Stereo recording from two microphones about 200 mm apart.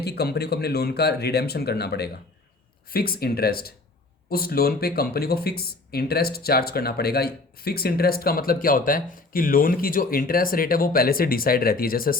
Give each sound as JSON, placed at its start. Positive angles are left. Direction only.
{"t": 0.0, "sound": "speech", "side_deg": 55}